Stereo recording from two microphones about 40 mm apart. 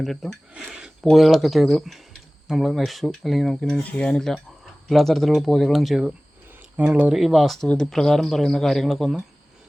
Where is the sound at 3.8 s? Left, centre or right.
Left.